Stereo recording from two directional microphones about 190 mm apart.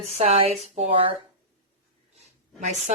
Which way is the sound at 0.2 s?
35° right (ahead or behind).